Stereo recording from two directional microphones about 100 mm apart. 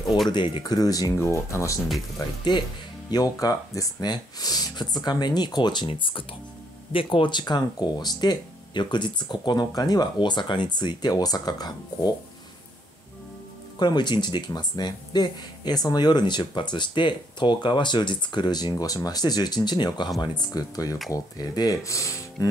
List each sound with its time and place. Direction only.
0.3 s speech: 50° left (ahead or behind); by 1.8 s 30° left (ahead or behind)
3.1 s speech: 40° left (ahead or behind)
13.7 s speech: 45° left (ahead or behind)